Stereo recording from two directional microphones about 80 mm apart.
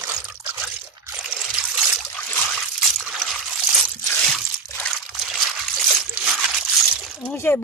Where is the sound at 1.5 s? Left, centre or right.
Centre.